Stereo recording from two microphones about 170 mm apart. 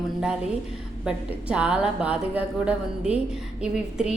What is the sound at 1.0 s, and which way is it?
A woman's voice, 5° right (ahead or behind).